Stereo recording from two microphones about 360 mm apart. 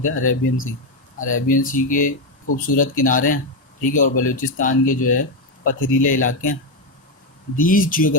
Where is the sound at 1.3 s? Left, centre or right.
Left.